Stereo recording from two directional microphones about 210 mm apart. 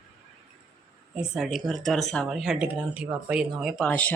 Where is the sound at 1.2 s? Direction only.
Centre (ahead or behind).